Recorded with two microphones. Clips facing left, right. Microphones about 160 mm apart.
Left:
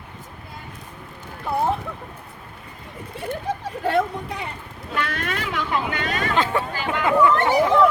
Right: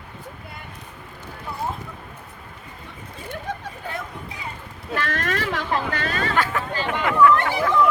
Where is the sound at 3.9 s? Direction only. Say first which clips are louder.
Left 13 dB; 75° left (ahead or behind).